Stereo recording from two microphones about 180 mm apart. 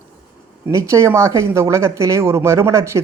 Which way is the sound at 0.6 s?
15° right (ahead or behind).